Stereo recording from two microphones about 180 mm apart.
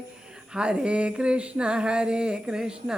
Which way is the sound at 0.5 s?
5° right (ahead or behind).